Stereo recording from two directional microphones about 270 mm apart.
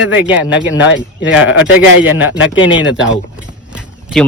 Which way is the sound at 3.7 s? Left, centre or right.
Centre.